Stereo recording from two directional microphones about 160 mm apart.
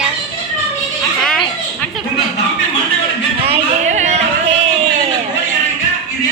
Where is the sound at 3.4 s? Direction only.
45° right (ahead or behind).